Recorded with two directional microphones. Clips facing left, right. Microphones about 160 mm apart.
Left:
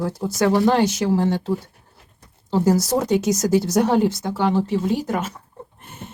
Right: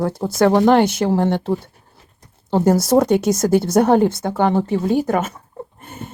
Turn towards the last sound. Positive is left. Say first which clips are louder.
# right 5 dB
turn(degrees=-55)  # may be behind; listen again after turning